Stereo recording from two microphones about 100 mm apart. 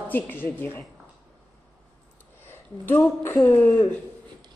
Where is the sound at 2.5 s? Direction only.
20° left (ahead or behind).